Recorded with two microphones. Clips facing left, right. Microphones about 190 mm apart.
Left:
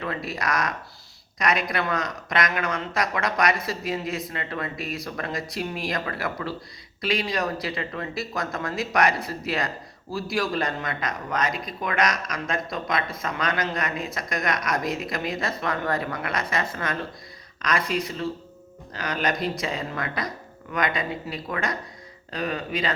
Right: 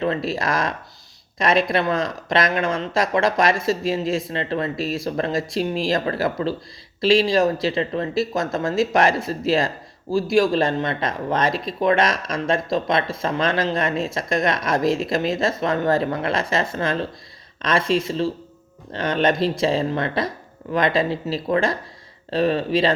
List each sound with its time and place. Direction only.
0.0 s speech: 25° right (ahead or behind)